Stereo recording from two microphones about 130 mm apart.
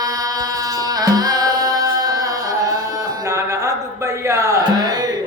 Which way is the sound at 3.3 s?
25° right (ahead or behind).